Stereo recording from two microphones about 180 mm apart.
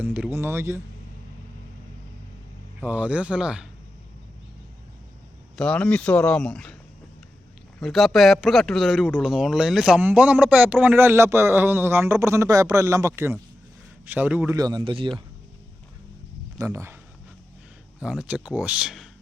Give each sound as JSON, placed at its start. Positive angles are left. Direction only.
{"t": 0.0, "sound": "a man's voice", "side_deg": -10}
{"t": 2.8, "sound": "a man's voice", "side_deg": -10}
{"t": 5.5, "sound": "speech", "side_deg": 5}
{"t": 7.8, "sound": "a man's voice", "side_deg": 0}
{"t": 14.5, "sound": "speech", "side_deg": -20}
{"t": 16.6, "sound": "speech", "side_deg": -15}
{"t": 18.0, "sound": "speech", "side_deg": -5}